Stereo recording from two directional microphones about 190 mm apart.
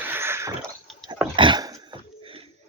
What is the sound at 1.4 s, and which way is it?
Dog, 20° right (ahead or behind).